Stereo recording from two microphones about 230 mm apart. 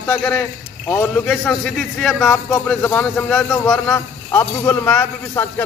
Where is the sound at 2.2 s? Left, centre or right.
Centre.